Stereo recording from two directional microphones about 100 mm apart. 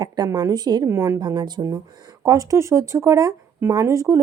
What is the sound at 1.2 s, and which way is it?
Speech, 45° right (ahead or behind).